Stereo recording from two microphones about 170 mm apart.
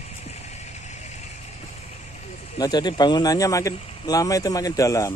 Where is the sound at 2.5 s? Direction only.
25° left (ahead or behind).